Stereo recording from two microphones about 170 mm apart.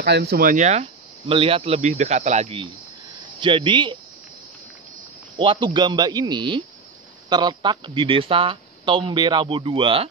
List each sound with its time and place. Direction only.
0.0 s speech: 75° right (ahead or behind); by 4.0 s 30° right (ahead or behind)
5.4 s speech: 30° right (ahead or behind)